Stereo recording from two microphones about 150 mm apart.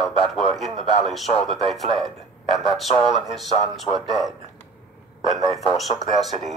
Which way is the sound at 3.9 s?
30° right (ahead or behind).